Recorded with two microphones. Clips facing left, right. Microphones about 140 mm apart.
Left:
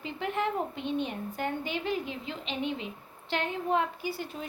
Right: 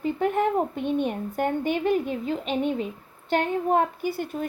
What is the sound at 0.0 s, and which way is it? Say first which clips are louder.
A woman's voice: right 8 dB; 50° right (ahead or behind).